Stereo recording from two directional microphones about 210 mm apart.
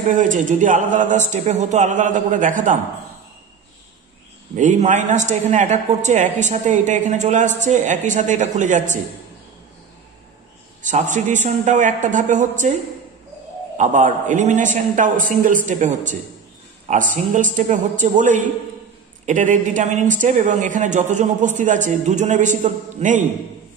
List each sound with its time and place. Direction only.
0.2 s a woman's voice: 35° right (ahead or behind)
4.6 s a woman's voice: 35° right (ahead or behind)
10.8 s a woman's voice: 35° right (ahead or behind)
13.7 s a woman's voice: 35° right (ahead or behind)